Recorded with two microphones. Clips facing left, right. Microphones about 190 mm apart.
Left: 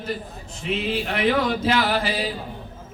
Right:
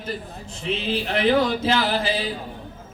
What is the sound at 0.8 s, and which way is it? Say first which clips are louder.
Speech: right 1 dB; 30° right (ahead or behind).